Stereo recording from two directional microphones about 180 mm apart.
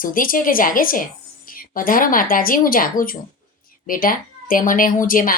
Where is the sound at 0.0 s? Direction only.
50° left (ahead or behind).